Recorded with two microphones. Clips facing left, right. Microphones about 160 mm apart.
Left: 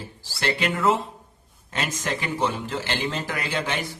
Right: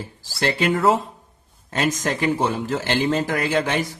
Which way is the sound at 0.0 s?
40° right (ahead or behind).